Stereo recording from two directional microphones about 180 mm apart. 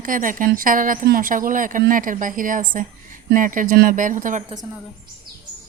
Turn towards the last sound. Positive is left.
turn(degrees=-45)  # may be behind; listen again after turning